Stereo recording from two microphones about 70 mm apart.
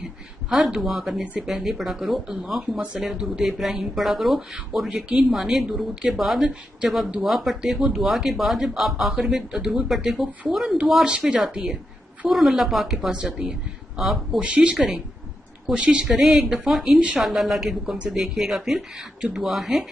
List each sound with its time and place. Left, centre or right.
0.5 s speech: centre
1.2 s speech: centre
1.5 s speech: centre
4.8 s speech: centre
5.3 s speech: centre
11.1 s speech: centre
13.9 s speech: centre
14.4 s speech: centre